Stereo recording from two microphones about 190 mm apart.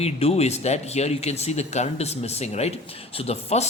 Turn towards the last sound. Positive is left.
turn(degrees=35)  # may be behind; listen again after turning